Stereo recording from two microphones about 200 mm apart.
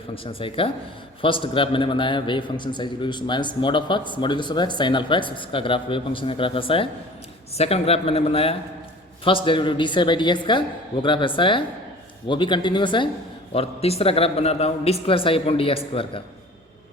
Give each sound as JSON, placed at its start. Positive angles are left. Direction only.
{"t": 0.1, "sound": "a man's voice", "side_deg": 25}